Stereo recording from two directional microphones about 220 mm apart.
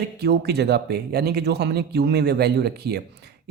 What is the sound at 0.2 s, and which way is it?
Speech, 50° right (ahead or behind).